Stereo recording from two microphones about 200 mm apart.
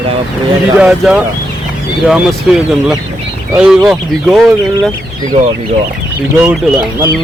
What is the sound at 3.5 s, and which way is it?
Speech, 5° right (ahead or behind).